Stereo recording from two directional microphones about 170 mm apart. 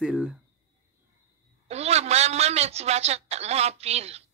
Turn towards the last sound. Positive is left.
turn(degrees=-40)  # may be behind; listen again after turning